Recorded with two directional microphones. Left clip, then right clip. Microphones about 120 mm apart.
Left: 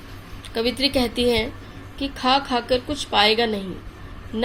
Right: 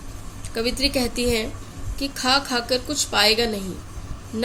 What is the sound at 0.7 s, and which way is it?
A woman's voice, 25° left (ahead or behind).